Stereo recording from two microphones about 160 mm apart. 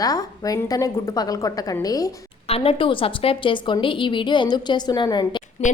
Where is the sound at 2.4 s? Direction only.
35° left (ahead or behind).